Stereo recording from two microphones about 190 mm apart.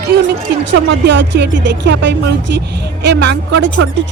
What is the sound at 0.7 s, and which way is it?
Speech, 65° right (ahead or behind).